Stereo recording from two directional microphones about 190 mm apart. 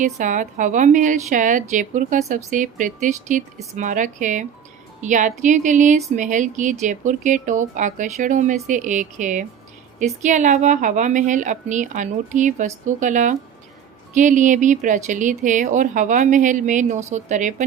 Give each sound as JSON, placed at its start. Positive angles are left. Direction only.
{"t": 0.0, "sound": "a woman's voice", "side_deg": -40}